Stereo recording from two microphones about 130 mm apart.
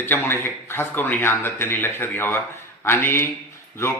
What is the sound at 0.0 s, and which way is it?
A man's voice, 20° left (ahead or behind).